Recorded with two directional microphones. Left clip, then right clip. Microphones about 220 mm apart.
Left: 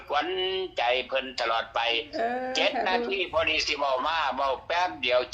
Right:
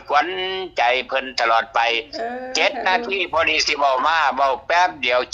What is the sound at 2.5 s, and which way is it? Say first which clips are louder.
A man's voice: right 9 dB; 50° right (ahead or behind).